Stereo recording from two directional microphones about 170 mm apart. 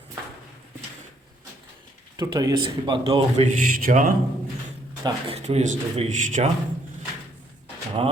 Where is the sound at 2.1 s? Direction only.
25° right (ahead or behind); by 4.1 s 50° right (ahead or behind).